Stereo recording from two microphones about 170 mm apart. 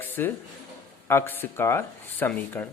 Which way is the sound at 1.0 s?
15° left (ahead or behind).